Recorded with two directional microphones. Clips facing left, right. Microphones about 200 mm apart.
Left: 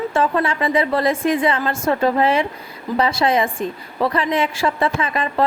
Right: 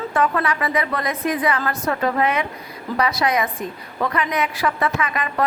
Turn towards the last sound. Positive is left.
turn(degrees=30)  # may be behind; listen again after turning